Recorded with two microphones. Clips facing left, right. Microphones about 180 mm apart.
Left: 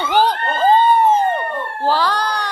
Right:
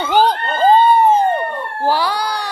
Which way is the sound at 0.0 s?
15° right (ahead or behind).